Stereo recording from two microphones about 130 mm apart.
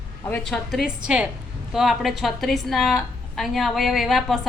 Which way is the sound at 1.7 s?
Centre (ahead or behind).